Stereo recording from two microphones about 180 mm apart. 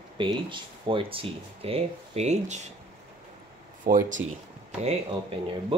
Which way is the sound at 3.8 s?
45° right (ahead or behind).